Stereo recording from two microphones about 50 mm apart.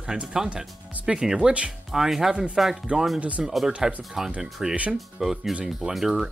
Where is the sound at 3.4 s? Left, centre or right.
Centre.